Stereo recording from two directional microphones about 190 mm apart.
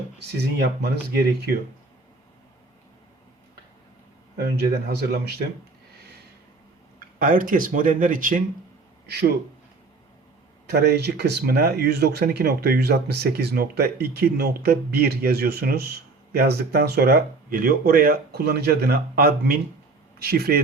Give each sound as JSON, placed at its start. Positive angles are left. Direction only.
{"t": 0.3, "sound": "speech", "side_deg": -60}
{"t": 4.4, "sound": "speech", "side_deg": -60}
{"t": 7.2, "sound": "speech", "side_deg": -45}
{"t": 9.0, "sound": "speech", "side_deg": -60}
{"t": 10.7, "sound": "speech", "side_deg": -60}